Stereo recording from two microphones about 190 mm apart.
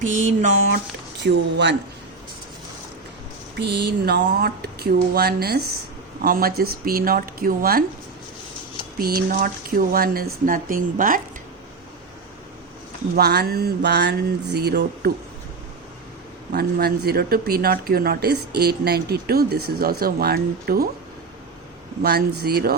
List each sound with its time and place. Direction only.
0.1 s a sound: 40° right (ahead or behind)
1.2 s speech: 65° right (ahead or behind)
3.6 s speech: 65° right (ahead or behind)
9.0 s speech: 50° right (ahead or behind)
13.1 s speech: 55° right (ahead or behind)
16.5 s speech: 55° right (ahead or behind)
22.0 s speech: 55° right (ahead or behind)